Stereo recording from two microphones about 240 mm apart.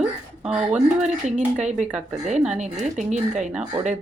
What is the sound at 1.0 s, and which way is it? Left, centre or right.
Speech, right.